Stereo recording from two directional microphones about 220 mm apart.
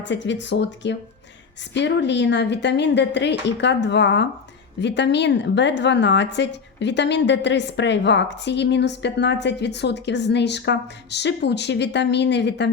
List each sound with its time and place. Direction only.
0.0 s a woman's voice: 55° left (ahead or behind)